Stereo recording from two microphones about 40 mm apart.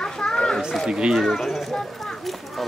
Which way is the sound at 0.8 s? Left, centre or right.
Centre.